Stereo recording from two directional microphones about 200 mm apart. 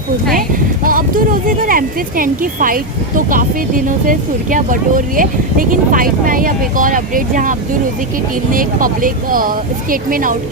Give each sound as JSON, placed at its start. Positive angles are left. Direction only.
{"t": 0.9, "sound": "speech", "side_deg": -45}
{"t": 8.5, "sound": "speech", "side_deg": -45}